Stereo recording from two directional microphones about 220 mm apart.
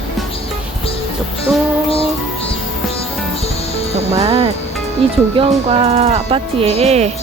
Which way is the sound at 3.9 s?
25° right (ahead or behind).